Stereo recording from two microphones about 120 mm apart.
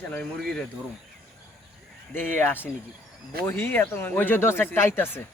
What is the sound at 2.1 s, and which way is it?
Speech, 15° left (ahead or behind).